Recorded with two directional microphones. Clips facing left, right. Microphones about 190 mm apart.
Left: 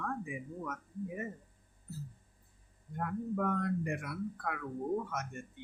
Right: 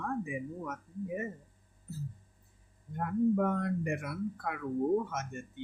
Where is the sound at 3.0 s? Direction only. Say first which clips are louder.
Right 6 dB; 25° right (ahead or behind).